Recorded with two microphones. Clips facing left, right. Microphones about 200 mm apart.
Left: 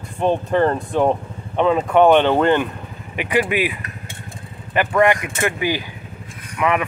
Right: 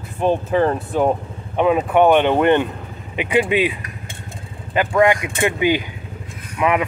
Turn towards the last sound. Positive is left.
turn(degrees=-20)  # may be behind; listen again after turning